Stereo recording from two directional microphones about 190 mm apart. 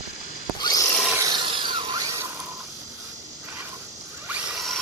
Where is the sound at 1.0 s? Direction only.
15° right (ahead or behind).